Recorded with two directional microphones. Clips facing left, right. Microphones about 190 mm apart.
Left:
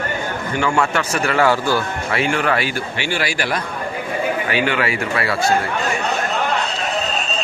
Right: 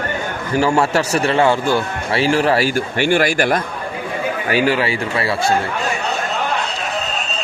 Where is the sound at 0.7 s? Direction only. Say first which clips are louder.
Right 2 dB; 35° right (ahead or behind); by 3.6 s 50° right (ahead or behind).